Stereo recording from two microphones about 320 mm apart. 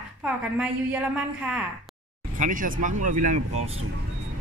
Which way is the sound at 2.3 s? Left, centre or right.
Right.